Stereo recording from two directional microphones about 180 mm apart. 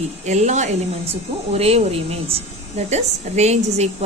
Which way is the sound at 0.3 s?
40° right (ahead or behind).